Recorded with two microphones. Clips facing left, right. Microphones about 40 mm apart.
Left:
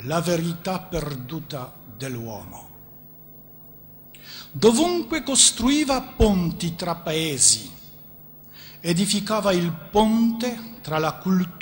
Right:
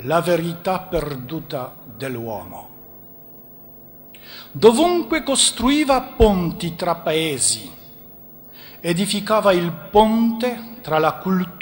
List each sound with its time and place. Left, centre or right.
0.0 s a man's voice: centre
4.3 s a man's voice: centre
8.8 s a man's voice: centre